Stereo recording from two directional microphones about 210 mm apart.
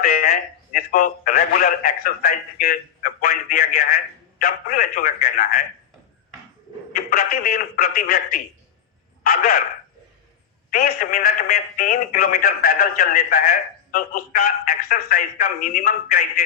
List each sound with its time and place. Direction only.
0.0 s a man's voice: 45° left (ahead or behind)
6.9 s a man's voice: 45° left (ahead or behind)
9.2 s a man's voice: 45° left (ahead or behind)
10.7 s a man's voice: 45° left (ahead or behind)